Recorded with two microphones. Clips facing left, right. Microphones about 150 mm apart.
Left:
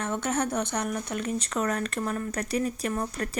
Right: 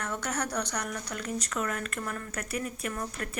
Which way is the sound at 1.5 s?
35° left (ahead or behind).